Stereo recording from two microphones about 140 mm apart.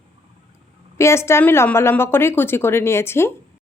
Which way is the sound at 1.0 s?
20° left (ahead or behind).